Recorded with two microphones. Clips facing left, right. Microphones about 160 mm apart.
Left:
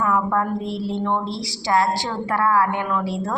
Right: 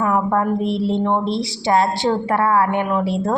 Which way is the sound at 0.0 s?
25° right (ahead or behind).